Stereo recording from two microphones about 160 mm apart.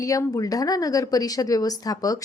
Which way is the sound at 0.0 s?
20° left (ahead or behind).